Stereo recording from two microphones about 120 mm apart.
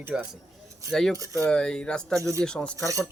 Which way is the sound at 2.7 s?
25° right (ahead or behind).